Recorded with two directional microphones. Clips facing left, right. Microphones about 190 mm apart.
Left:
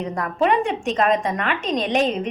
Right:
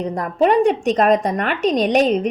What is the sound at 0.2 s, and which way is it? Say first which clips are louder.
A woman's voice: right 5 dB; 35° right (ahead or behind).